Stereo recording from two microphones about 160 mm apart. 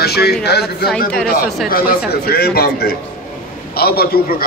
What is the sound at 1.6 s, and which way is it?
Speech, 60° left (ahead or behind).